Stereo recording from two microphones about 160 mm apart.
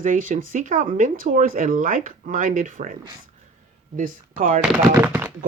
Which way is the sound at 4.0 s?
60° right (ahead or behind).